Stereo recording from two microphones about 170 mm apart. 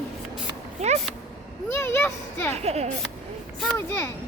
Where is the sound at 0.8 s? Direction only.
40° right (ahead or behind).